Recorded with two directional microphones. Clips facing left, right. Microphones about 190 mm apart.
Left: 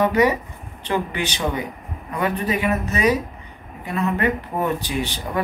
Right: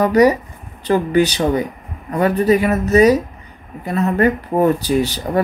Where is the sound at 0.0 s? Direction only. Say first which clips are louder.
Right 5 dB; 40° right (ahead or behind).